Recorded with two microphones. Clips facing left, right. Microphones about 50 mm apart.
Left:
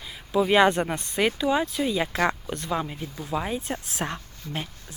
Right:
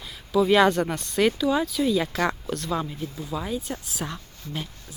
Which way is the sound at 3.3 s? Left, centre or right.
Left.